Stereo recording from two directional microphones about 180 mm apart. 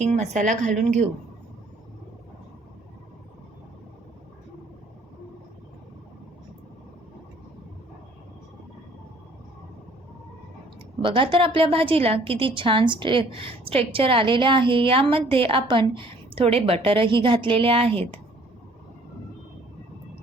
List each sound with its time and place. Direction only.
0.0 s a woman's voice: 40° right (ahead or behind)
11.0 s a woman's voice: 30° right (ahead or behind)